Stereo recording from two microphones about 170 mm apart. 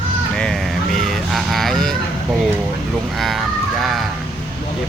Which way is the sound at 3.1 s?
Centre (ahead or behind).